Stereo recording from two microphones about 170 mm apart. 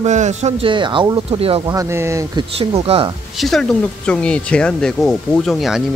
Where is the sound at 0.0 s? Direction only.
45° right (ahead or behind).